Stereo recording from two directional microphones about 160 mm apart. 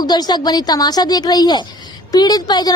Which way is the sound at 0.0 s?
25° left (ahead or behind).